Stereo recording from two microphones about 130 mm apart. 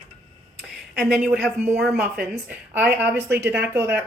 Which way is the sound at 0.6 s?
5° right (ahead or behind).